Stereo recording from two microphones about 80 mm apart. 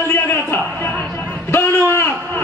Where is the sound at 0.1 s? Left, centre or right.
Left.